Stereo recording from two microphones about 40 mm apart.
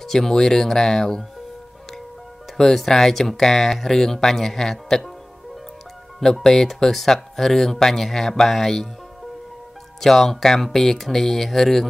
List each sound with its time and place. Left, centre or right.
0.0 s speech: centre
2.5 s speech: centre
6.1 s speech: centre
6.4 s speech: centre
9.9 s speech: centre